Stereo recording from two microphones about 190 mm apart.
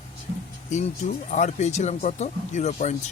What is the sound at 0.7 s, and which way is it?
Speech, 40° left (ahead or behind).